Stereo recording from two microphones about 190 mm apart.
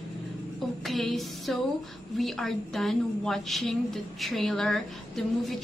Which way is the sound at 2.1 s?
Centre (ahead or behind).